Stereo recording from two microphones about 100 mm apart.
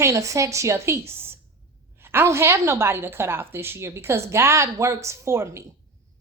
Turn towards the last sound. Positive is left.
turn(degrees=-25)  # may be behind; listen again after turning